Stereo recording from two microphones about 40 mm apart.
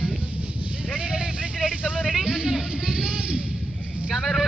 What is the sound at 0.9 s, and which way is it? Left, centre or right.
Vehicle, right.